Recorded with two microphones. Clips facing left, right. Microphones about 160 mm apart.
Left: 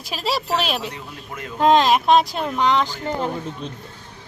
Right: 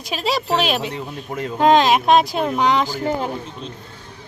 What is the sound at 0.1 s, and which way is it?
Speech, centre (ahead or behind).